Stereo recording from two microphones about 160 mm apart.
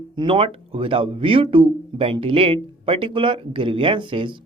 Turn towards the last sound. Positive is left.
turn(degrees=-30)  # may be behind; listen again after turning